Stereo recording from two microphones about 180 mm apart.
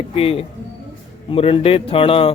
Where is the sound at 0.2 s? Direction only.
35° left (ahead or behind).